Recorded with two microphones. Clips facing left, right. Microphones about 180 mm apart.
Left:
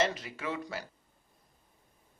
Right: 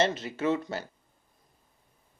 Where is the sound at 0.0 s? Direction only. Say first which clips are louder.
Right 5 dB; 25° right (ahead or behind).